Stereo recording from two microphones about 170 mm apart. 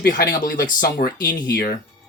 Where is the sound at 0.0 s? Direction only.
60° left (ahead or behind).